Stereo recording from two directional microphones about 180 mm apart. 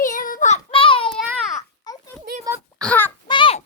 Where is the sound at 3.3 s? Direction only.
25° left (ahead or behind).